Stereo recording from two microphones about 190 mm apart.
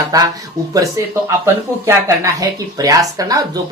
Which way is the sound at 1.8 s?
15° right (ahead or behind).